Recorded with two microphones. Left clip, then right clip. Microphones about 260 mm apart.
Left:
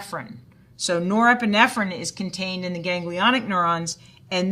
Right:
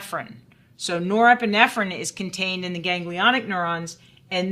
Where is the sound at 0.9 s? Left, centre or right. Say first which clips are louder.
Right 2 dB; right.